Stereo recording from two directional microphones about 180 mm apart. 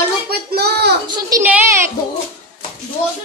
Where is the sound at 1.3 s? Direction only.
10° right (ahead or behind).